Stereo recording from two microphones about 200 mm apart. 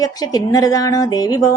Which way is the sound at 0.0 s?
20° left (ahead or behind).